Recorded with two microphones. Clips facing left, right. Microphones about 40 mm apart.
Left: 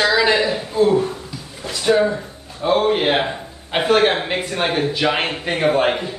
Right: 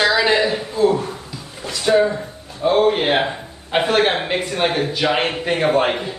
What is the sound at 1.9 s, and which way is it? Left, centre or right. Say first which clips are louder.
A man's voice: right 1 dB; centre.